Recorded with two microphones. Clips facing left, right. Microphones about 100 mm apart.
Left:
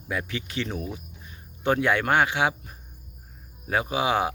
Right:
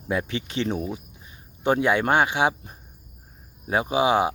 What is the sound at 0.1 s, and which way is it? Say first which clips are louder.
Speech: right 4 dB; 25° right (ahead or behind).